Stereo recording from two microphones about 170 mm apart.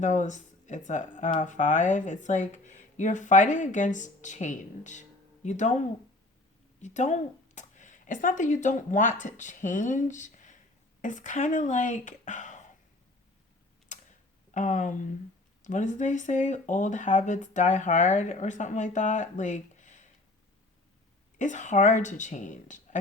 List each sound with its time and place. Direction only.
0.0 s speech: 45° left (ahead or behind)
13.9 s tick-tock: 45° left (ahead or behind)
14.5 s speech: 45° left (ahead or behind)
21.3 s speech: 45° left (ahead or behind)